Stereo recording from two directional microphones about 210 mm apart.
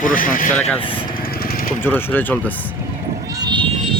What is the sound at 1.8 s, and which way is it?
Speech, 10° left (ahead or behind).